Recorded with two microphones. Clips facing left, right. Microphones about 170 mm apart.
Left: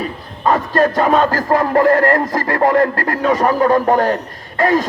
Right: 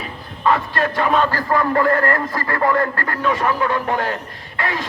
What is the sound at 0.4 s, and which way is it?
Music, 40° left (ahead or behind).